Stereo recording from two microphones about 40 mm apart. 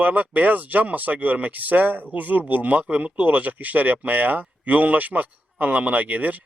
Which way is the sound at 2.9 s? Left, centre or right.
Right.